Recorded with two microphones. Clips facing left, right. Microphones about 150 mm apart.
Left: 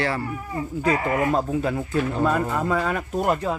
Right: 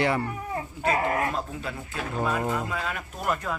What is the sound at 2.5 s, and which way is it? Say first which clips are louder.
Speech: left 7 dB; 50° left (ahead or behind).